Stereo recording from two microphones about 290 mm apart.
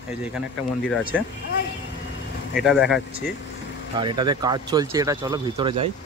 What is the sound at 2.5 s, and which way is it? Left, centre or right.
Speech, centre.